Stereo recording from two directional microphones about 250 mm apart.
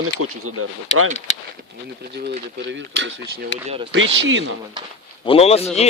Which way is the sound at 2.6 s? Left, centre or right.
Right.